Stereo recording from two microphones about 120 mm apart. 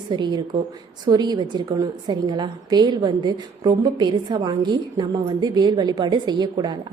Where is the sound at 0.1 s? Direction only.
40° right (ahead or behind).